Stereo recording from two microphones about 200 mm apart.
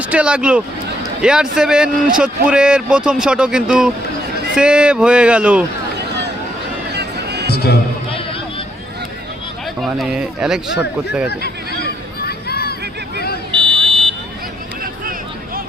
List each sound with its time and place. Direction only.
0.0 s speech: 5° right (ahead or behind)
6.9 s music: 55° right (ahead or behind)
7.5 s speech: 50° left (ahead or behind)
9.8 s speech: centre (ahead or behind)
11.3 s hubbub: 50° left (ahead or behind)
13.5 s buzzer: 25° right (ahead or behind)